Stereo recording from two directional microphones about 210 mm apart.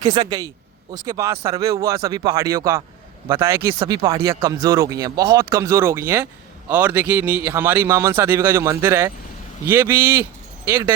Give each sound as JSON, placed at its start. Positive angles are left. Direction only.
{"t": 0.0, "sound": "a man's voice", "side_deg": -20}